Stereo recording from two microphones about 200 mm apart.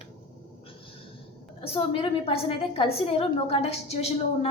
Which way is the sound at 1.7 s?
30° left (ahead or behind).